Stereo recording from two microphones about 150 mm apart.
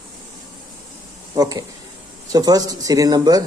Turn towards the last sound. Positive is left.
turn(degrees=-25)  # may be behind; listen again after turning